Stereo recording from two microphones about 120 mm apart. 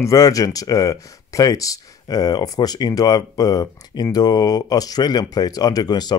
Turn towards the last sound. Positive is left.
turn(degrees=35)  # may be behind; listen again after turning